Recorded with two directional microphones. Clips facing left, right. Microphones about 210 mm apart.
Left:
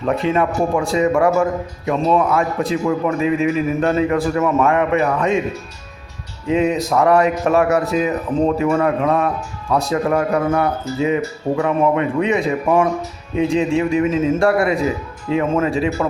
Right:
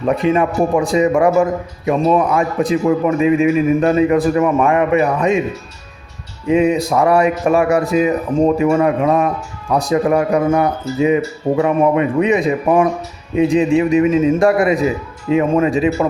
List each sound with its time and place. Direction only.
0.3 s a man's voice: 15° right (ahead or behind)
6.5 s a man's voice: 10° right (ahead or behind)